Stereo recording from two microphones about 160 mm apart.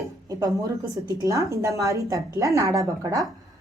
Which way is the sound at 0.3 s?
25° right (ahead or behind).